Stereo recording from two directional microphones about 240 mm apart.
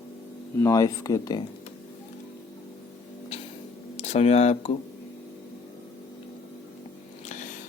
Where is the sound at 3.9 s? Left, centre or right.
Left.